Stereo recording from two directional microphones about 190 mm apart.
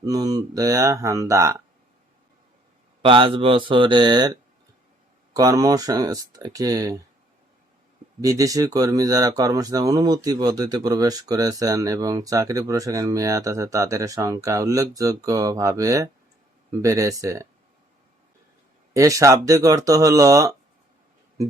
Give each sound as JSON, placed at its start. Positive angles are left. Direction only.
{"t": 0.0, "sound": "speech", "side_deg": -20}
{"t": 3.0, "sound": "speech", "side_deg": -25}
{"t": 8.2, "sound": "speech", "side_deg": -20}
{"t": 18.9, "sound": "speech", "side_deg": -15}